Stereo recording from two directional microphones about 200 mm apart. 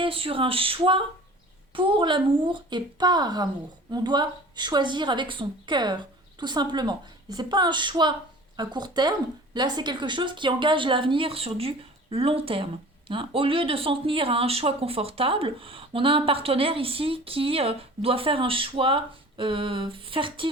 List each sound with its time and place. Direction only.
0.0 s speech: 25° right (ahead or behind)